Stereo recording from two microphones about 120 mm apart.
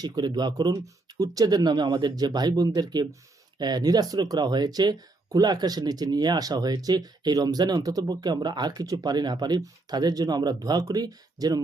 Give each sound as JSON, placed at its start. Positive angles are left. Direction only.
{"t": 0.0, "sound": "speech", "side_deg": -35}